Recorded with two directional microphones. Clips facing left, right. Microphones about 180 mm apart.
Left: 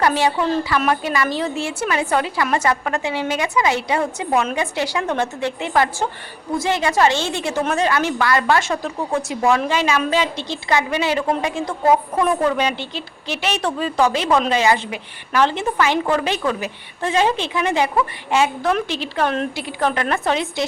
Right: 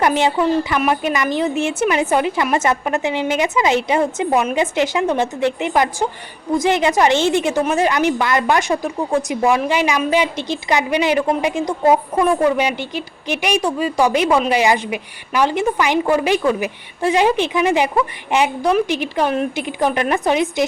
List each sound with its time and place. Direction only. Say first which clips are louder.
0.0 s a woman's voice: right 2 dB; 20° right (ahead or behind)